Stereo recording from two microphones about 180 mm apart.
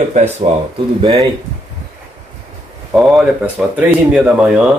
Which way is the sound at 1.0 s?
25° right (ahead or behind).